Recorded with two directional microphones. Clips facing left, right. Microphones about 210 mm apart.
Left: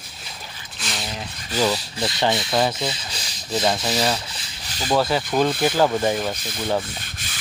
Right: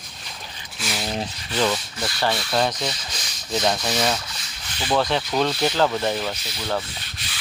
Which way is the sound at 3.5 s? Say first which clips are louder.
Left 1 dB; 5° left (ahead or behind).